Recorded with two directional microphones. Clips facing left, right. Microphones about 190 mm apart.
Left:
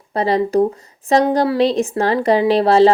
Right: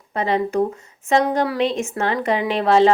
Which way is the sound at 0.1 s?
35° left (ahead or behind).